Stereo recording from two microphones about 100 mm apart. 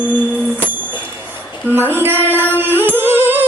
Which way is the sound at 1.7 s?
20° right (ahead or behind).